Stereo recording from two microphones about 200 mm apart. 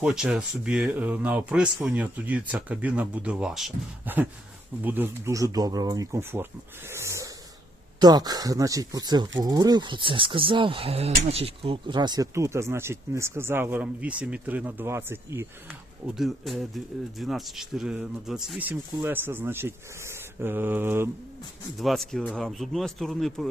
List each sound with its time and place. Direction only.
0.0 s speech: 5° right (ahead or behind)
6.9 s snort: 15° right (ahead or behind)
7.9 s speech: 20° right (ahead or behind)
16.0 s speech: centre (ahead or behind)
21.8 s speech: centre (ahead or behind)